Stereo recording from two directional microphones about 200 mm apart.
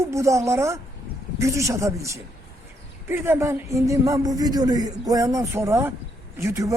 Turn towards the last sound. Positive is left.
turn(degrees=-15)  # may be behind; listen again after turning